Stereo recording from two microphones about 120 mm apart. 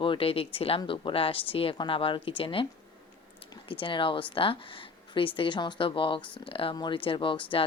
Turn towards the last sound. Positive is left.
turn(degrees=45)  # may be behind; listen again after turning